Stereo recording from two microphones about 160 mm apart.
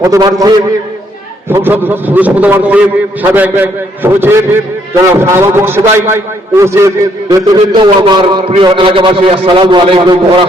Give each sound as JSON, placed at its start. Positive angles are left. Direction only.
{"t": 0.0, "sound": "a man's voice", "side_deg": -20}
{"t": 1.5, "sound": "a man's voice", "side_deg": -15}